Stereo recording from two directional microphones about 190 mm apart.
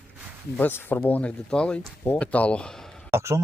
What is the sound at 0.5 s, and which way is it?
Speech, 10° left (ahead or behind).